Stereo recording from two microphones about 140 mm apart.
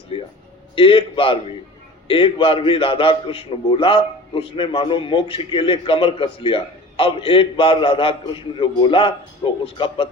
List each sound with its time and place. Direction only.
0.8 s a man's voice: 40° left (ahead or behind)